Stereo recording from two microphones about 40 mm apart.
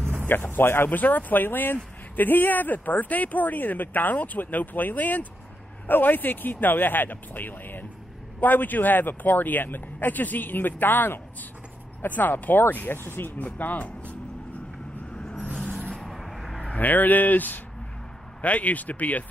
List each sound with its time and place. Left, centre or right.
0.3 s speech: left
0.8 s speech: left
5.9 s speech: left
13.0 s speech: left
13.4 s speech: left
15.9 s vehicle: centre
16.7 s speech: left